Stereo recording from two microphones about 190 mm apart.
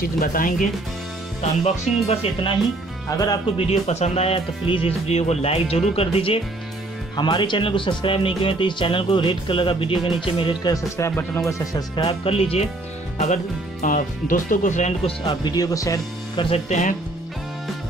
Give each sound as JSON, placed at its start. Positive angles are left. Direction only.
{"t": 0.0, "sound": "speech", "side_deg": 45}
{"t": 1.4, "sound": "speech", "side_deg": 35}
{"t": 3.1, "sound": "speech", "side_deg": 20}
{"t": 3.5, "sound": "speech", "side_deg": 35}
{"t": 13.2, "sound": "speech", "side_deg": 40}
{"t": 15.2, "sound": "speech", "side_deg": 20}
{"t": 16.4, "sound": "speech", "side_deg": 35}